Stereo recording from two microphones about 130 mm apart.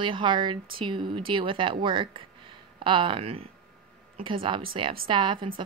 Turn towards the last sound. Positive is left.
turn(degrees=-40)  # may be behind; listen again after turning